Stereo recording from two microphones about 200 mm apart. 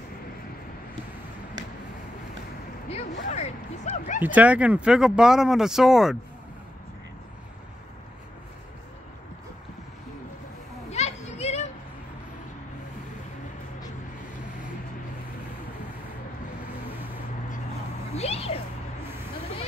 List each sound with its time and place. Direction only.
2.9 s speech: 35° left (ahead or behind)
4.2 s speech: 10° right (ahead or behind)
10.9 s a sound: 35° left (ahead or behind)
18.1 s cat: 30° left (ahead or behind)